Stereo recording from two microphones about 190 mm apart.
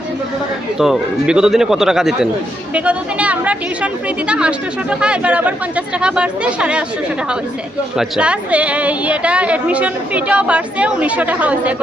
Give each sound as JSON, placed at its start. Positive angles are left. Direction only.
{"t": 0.8, "sound": "a woman's voice", "side_deg": -5}
{"t": 7.9, "sound": "a woman's voice", "side_deg": -5}